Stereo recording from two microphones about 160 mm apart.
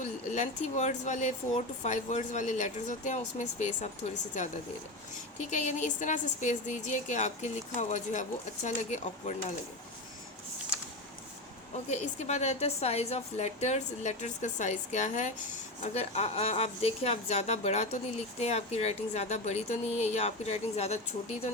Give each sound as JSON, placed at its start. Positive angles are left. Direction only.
{"t": 0.3, "sound": "speech", "side_deg": 45}
{"t": 5.5, "sound": "speech", "side_deg": 45}
{"t": 11.9, "sound": "a woman's voice", "side_deg": 45}